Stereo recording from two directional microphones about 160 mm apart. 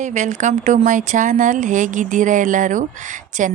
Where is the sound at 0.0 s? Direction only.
50° right (ahead or behind).